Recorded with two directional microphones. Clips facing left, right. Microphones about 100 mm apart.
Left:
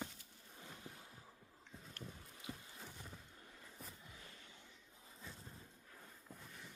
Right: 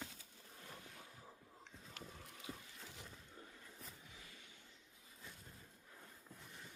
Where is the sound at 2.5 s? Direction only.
5° right (ahead or behind).